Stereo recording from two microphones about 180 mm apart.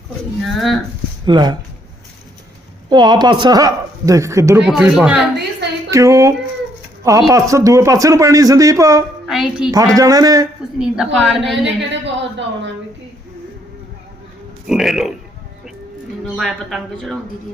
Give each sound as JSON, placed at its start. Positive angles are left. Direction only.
{"t": 0.4, "sound": "a woman's voice", "side_deg": 0}
{"t": 1.2, "sound": "speech", "side_deg": -25}
{"t": 2.9, "sound": "speech", "side_deg": -25}
{"t": 4.6, "sound": "a woman's voice", "side_deg": -5}
{"t": 5.9, "sound": "a man's voice", "side_deg": -15}
{"t": 9.2, "sound": "a woman's voice", "side_deg": 0}
{"t": 9.7, "sound": "speech", "side_deg": -20}
{"t": 10.8, "sound": "a woman's voice", "side_deg": 0}
{"t": 11.6, "sound": "a woman's voice", "side_deg": -85}
{"t": 14.7, "sound": "a woman's voice", "side_deg": 0}
{"t": 16.4, "sound": "a woman's voice", "side_deg": 0}